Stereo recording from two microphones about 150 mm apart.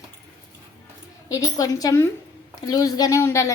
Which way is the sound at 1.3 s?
20° left (ahead or behind).